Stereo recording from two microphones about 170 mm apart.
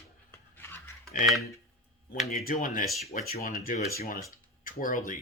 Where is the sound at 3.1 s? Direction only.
45° left (ahead or behind).